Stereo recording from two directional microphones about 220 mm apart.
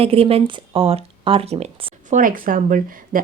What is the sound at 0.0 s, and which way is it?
Speech, 25° right (ahead or behind).